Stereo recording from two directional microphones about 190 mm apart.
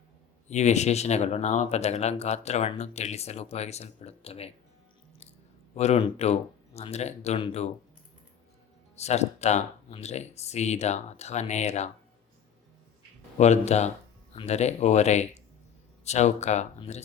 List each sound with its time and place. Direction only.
0.4 s speech: 35° left (ahead or behind)
5.7 s speech: 35° left (ahead or behind)
9.0 s speech: 35° left (ahead or behind)
13.4 s speech: 35° left (ahead or behind)